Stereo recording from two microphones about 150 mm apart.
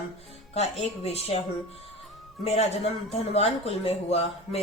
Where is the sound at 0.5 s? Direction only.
45° left (ahead or behind).